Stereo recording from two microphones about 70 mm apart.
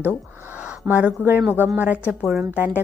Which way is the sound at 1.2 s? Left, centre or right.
Right.